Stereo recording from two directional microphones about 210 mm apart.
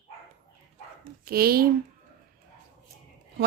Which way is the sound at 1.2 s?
45° right (ahead or behind).